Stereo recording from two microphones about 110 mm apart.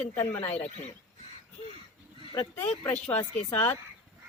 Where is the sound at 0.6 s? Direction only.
90° left.